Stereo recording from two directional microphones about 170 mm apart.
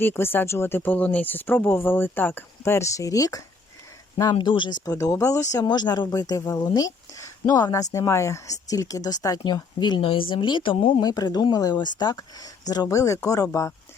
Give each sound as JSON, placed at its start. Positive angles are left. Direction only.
{"t": 0.0, "sound": "speech", "side_deg": 15}